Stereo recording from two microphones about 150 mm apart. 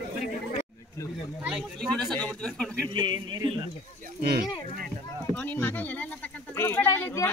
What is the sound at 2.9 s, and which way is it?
Speech, 30° right (ahead or behind).